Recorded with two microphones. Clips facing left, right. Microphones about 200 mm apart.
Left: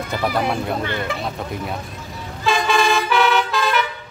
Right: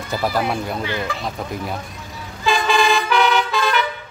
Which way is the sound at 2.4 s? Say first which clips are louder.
Even; centre (ahead or behind).